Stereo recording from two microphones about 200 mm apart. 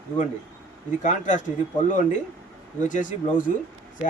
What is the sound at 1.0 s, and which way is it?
Speech, 40° left (ahead or behind).